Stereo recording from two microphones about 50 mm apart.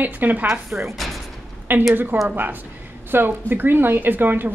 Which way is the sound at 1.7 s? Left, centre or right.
Right.